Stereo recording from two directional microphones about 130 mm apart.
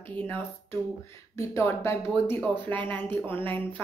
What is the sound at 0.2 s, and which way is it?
A woman's voice, 15° left (ahead or behind).